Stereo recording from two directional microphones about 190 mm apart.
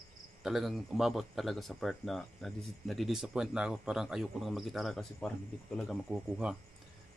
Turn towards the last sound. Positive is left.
turn(degrees=-5)  # may be behind; listen again after turning